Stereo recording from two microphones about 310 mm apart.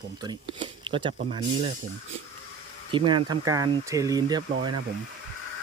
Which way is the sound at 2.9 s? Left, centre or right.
Centre.